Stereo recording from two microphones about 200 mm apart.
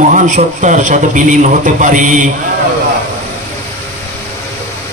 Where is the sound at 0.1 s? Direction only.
40° right (ahead or behind).